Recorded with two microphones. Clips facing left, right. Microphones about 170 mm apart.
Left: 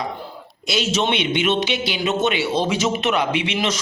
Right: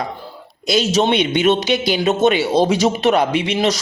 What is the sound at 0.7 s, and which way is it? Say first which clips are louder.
A man's voice: right 5 dB; 40° right (ahead or behind).